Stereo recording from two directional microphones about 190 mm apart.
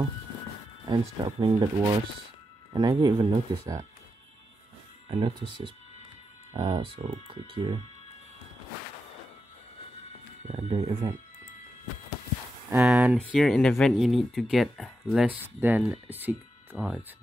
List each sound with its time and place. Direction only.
0.8 s speech: 25° right (ahead or behind)
2.7 s speech: 20° right (ahead or behind)
5.0 s speech: 30° right (ahead or behind)
10.4 s speech: 35° right (ahead or behind)
12.6 s speech: 5° right (ahead or behind)